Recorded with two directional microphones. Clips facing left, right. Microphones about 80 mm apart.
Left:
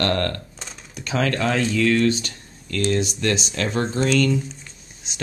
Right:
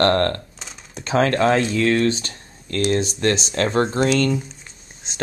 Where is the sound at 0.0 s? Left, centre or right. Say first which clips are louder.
Right 5 dB; right.